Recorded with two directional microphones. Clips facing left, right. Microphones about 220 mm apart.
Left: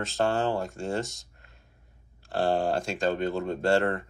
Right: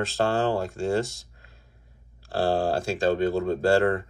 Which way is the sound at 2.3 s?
30° right (ahead or behind).